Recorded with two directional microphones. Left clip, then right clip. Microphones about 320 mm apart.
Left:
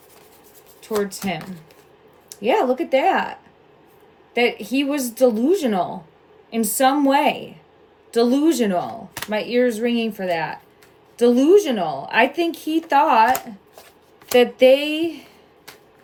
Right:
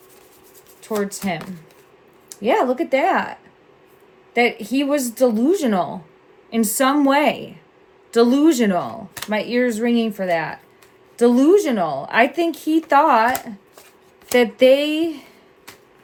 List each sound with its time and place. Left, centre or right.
0.8 s speech: centre
4.4 s speech: centre